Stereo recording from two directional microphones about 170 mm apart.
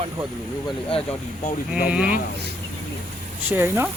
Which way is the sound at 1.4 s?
55° left (ahead or behind).